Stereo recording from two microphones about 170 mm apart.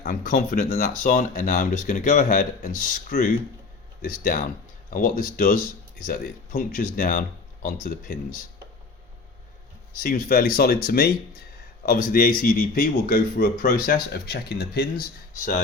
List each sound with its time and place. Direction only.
0.0 s speech: 60° left (ahead or behind)
10.0 s speech: 55° left (ahead or behind)